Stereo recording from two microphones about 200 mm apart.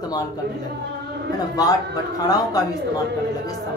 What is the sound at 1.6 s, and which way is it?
Speech, 20° left (ahead or behind).